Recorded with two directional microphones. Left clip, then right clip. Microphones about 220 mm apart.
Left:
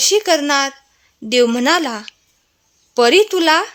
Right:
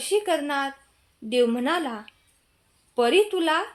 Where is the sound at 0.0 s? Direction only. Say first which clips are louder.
Left 10 dB; 50° left (ahead or behind).